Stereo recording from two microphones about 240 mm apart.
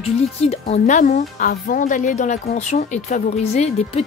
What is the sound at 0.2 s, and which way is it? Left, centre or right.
Speech, left.